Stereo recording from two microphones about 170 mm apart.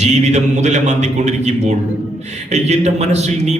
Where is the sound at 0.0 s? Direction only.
45° right (ahead or behind).